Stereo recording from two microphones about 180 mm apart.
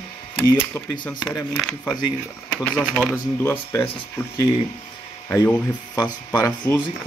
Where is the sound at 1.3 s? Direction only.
5° left (ahead or behind).